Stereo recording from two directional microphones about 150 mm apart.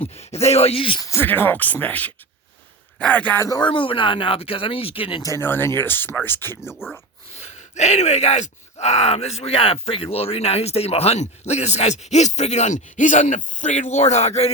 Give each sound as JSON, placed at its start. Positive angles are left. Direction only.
{"t": 0.0, "sound": "speech", "side_deg": 45}
{"t": 1.0, "sound": "speech", "side_deg": 15}
{"t": 3.4, "sound": "speech", "side_deg": 25}
{"t": 3.7, "sound": "speech", "side_deg": 35}
{"t": 5.2, "sound": "speech", "side_deg": 15}
{"t": 7.3, "sound": "speech", "side_deg": 50}